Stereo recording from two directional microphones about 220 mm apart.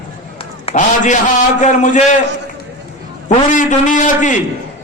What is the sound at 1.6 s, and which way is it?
Speech, 35° left (ahead or behind).